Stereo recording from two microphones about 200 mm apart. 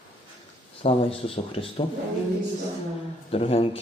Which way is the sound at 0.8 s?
25° left (ahead or behind).